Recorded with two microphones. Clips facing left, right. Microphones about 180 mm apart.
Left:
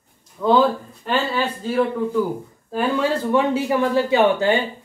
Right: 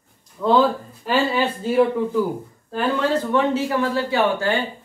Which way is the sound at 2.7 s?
5° left (ahead or behind).